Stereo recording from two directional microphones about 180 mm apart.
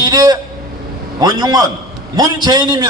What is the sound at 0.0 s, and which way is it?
Vehicle, 20° right (ahead or behind).